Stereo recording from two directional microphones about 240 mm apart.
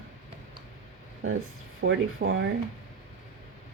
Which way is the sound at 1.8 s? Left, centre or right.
Right.